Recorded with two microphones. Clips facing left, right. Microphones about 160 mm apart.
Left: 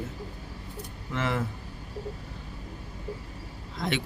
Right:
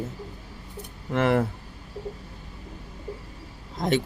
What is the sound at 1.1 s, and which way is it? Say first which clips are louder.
Speech: right 8 dB; 60° right (ahead or behind).